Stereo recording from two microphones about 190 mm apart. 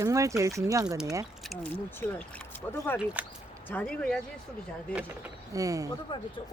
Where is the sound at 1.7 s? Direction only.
10° left (ahead or behind).